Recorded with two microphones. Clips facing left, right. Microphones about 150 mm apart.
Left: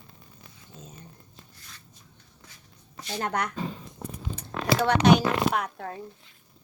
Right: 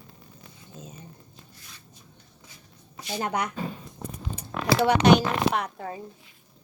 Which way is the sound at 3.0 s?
5° right (ahead or behind).